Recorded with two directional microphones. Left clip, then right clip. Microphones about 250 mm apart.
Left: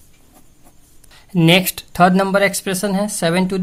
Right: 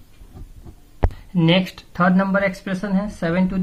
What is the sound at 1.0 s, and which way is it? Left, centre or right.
Speech, left.